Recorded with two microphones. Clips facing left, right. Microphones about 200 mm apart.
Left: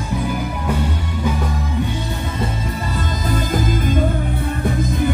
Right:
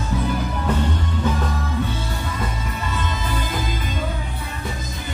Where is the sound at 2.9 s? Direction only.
40° left (ahead or behind).